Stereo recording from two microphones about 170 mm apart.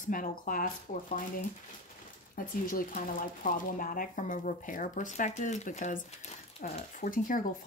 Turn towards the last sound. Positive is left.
turn(degrees=55)  # may be behind; listen again after turning